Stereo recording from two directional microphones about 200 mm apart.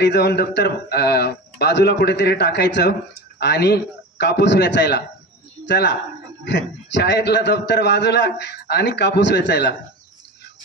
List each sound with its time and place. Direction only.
0.0 s a man's voice: 55° left (ahead or behind)